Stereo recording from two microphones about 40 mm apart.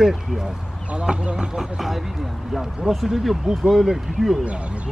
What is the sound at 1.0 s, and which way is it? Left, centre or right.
Speech, right.